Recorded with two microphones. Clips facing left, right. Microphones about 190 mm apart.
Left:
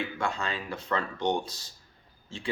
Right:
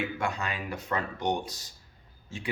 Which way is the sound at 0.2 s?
20° right (ahead or behind).